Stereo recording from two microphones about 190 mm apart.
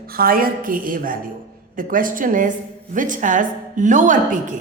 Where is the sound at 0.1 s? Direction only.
50° right (ahead or behind).